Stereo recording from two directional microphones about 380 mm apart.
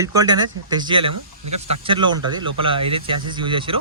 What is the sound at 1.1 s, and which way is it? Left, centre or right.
Speech, right.